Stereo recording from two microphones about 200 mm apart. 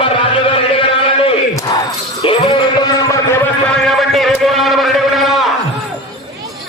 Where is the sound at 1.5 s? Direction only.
15° left (ahead or behind).